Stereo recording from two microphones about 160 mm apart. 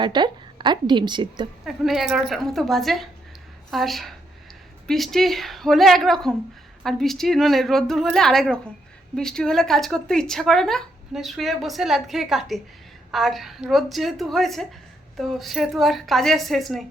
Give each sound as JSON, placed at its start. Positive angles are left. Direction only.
{"t": 0.0, "sound": "a woman's voice", "side_deg": -30}
{"t": 1.6, "sound": "speech", "side_deg": 0}